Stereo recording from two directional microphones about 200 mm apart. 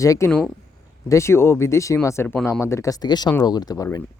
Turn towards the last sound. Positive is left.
turn(degrees=15)  # may be behind; listen again after turning